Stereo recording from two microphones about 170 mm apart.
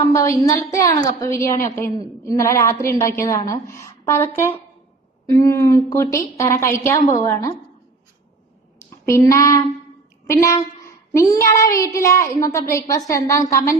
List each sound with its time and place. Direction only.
0.0 s child singing: 20° left (ahead or behind)
2.2 s a woman's voice: 20° left (ahead or behind)
9.0 s a woman's voice: 15° left (ahead or behind)
10.2 s child singing: 20° left (ahead or behind)